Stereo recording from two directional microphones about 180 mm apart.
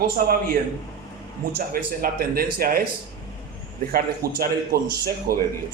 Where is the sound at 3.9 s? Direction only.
55° right (ahead or behind).